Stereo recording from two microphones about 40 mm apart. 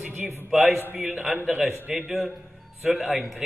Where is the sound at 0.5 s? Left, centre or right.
Centre.